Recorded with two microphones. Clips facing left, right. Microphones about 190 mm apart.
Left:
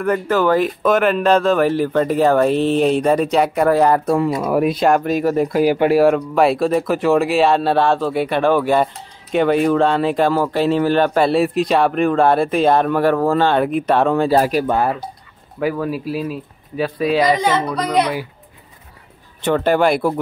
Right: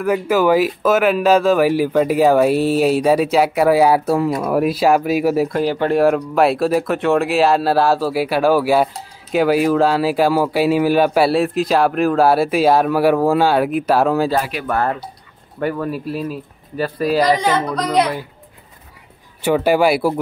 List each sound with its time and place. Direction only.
0.0 s speech: 10° right (ahead or behind)
5.5 s speech: 10° left (ahead or behind)
14.4 s speech: 40° left (ahead or behind)
14.7 s speech: 15° left (ahead or behind)
15.6 s speech: centre (ahead or behind)
19.4 s speech: 10° right (ahead or behind)